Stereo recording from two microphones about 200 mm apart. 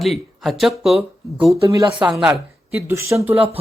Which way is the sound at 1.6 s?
15° right (ahead or behind).